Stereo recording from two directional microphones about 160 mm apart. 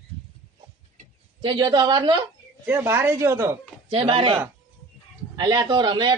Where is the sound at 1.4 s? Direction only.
30° right (ahead or behind).